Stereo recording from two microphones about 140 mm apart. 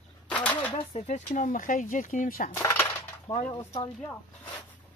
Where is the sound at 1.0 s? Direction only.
60° left (ahead or behind); by 2.5 s 80° left.